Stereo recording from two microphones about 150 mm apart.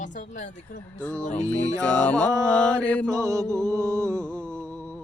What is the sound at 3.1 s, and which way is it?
Mantra, 20° right (ahead or behind).